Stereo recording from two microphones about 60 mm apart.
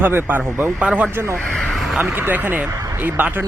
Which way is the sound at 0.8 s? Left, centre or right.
Centre.